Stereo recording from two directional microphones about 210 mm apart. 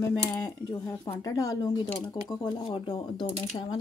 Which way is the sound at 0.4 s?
15° left (ahead or behind).